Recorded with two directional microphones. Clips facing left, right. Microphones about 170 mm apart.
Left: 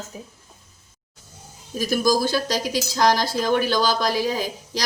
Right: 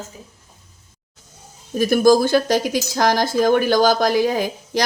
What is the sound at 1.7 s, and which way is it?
Speech, 55° right (ahead or behind).